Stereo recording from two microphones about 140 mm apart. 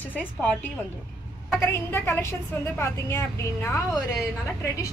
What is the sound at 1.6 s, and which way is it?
Speech, 15° left (ahead or behind).